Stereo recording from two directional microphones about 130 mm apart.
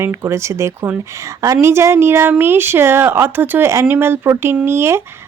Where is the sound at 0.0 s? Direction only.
20° right (ahead or behind).